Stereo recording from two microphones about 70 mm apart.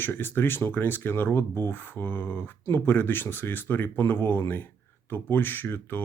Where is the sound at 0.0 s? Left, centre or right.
Left.